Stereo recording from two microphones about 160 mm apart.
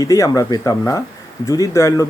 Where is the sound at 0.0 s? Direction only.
20° left (ahead or behind).